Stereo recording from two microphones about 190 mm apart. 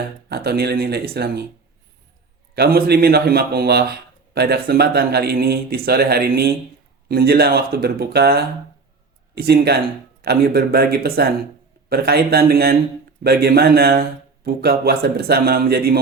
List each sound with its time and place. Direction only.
0.3 s speech: 55° right (ahead or behind)
2.6 s speech: 55° right (ahead or behind)